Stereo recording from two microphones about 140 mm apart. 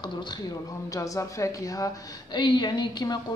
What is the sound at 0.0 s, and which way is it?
A woman's voice, 30° left (ahead or behind).